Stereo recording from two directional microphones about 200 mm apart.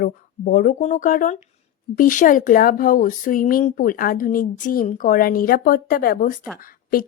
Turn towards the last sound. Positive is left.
turn(degrees=45)  # may be behind; listen again after turning